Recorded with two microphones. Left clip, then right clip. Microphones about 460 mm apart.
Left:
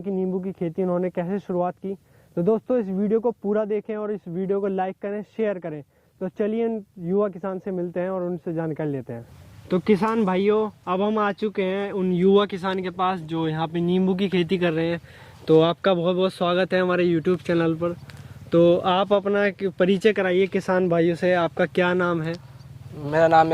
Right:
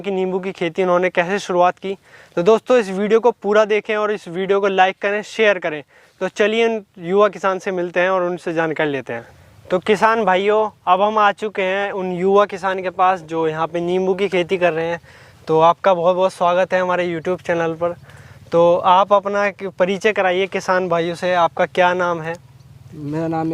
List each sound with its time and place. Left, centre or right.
0.0 s speech: centre
9.6 s speech: right
15.4 s speech: right
18.5 s speech: right
23.1 s speech: left